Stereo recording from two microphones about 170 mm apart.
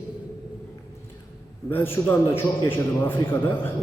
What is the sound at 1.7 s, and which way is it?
A man's voice, 15° left (ahead or behind).